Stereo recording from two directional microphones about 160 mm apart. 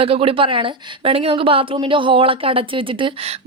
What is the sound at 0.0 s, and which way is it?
A woman's voice, 35° right (ahead or behind).